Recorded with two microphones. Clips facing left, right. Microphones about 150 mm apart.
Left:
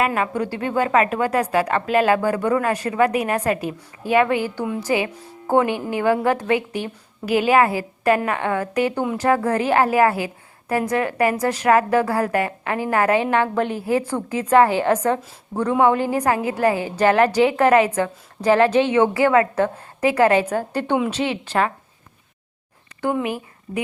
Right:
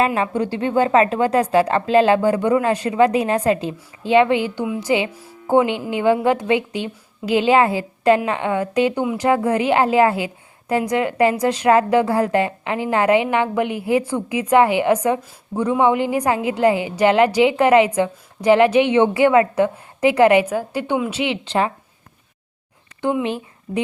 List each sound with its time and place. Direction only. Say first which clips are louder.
0.0 s speech: right 2 dB; 25° right (ahead or behind)
4.6 s a woman's voice: right 1 dB; 5° right (ahead or behind)
4.9 s a woman's voice: right 3 dB; 20° right (ahead or behind)
23.0 s a woman's voice: right 2 dB; 20° right (ahead or behind)